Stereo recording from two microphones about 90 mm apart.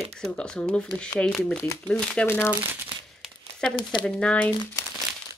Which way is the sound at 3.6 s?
10° left (ahead or behind).